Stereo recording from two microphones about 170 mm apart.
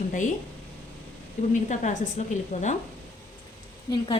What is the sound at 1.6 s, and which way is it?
A woman's voice, 45° left (ahead or behind).